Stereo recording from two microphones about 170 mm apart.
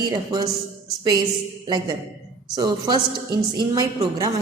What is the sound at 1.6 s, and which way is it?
A woman's voice, 25° right (ahead or behind).